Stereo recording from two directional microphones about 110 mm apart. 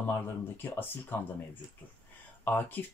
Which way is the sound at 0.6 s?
15° left (ahead or behind).